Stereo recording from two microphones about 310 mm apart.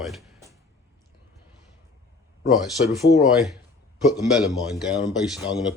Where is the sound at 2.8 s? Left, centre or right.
Centre.